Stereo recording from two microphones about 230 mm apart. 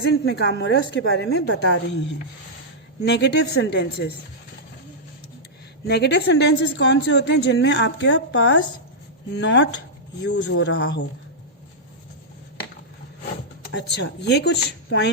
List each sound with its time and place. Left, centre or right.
0.1 s a woman's voice: left
5.9 s a woman's voice: left
13.7 s a woman's voice: left